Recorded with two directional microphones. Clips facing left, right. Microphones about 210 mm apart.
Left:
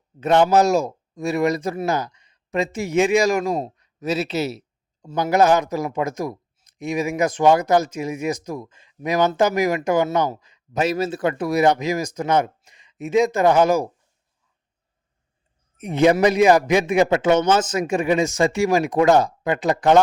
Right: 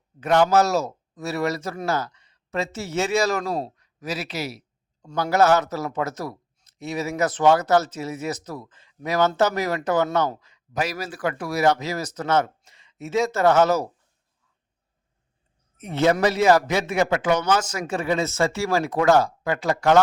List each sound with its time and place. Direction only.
0.2 s a man's voice: 20° left (ahead or behind)
15.8 s a man's voice: 15° left (ahead or behind)